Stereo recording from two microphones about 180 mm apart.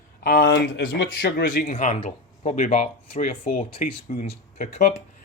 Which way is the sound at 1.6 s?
35° left (ahead or behind).